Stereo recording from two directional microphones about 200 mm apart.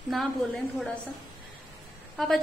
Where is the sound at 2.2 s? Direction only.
Centre (ahead or behind).